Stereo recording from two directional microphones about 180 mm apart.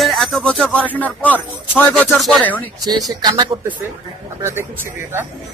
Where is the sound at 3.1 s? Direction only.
20° right (ahead or behind).